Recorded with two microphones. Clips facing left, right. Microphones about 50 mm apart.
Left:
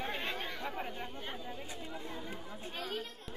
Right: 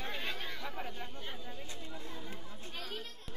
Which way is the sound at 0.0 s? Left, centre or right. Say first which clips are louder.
Left 2 dB; centre.